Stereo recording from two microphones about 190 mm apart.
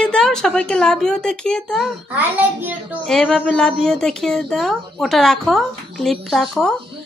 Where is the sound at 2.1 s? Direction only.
10° right (ahead or behind).